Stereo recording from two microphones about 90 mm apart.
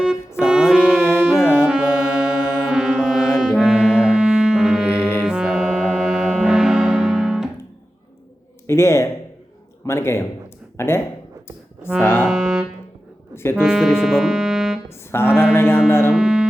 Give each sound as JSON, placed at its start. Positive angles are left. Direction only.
{"t": 0.4, "sound": "music", "side_deg": -10}
{"t": 1.4, "sound": "music", "side_deg": 25}
{"t": 1.6, "sound": "music", "side_deg": -10}
{"t": 8.6, "sound": "a sound", "side_deg": 30}
{"t": 9.8, "sound": "a man's voice", "side_deg": 30}
{"t": 11.9, "sound": "music", "side_deg": 25}
{"t": 12.3, "sound": "music", "side_deg": -5}
{"t": 13.3, "sound": "music", "side_deg": 30}
{"t": 13.6, "sound": "speech", "side_deg": -10}
{"t": 15.1, "sound": "a man's voice", "side_deg": 25}
{"t": 16.1, "sound": "music", "side_deg": -5}